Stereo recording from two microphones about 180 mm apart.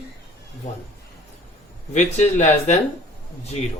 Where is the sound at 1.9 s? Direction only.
40° left (ahead or behind).